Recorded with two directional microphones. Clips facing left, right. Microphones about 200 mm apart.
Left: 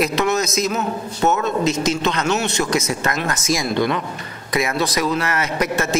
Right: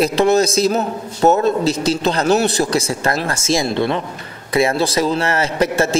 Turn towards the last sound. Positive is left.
turn(degrees=-30)  # may be behind; listen again after turning